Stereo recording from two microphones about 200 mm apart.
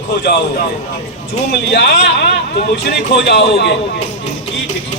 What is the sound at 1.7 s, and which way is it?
Speech, 55° left (ahead or behind).